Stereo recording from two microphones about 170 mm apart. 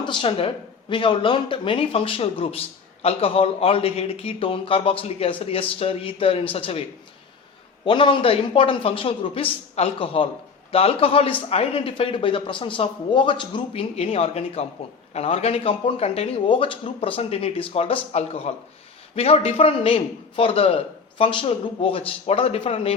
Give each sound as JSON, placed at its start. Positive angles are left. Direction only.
{"t": 0.0, "sound": "speech", "side_deg": 30}
{"t": 7.9, "sound": "speech", "side_deg": 30}